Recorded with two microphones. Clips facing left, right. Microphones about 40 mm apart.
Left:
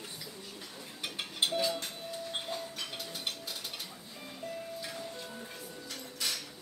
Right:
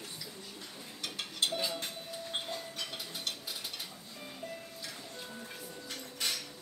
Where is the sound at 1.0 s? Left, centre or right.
Centre.